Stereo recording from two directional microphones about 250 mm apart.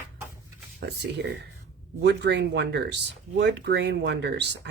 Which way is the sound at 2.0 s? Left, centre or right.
Right.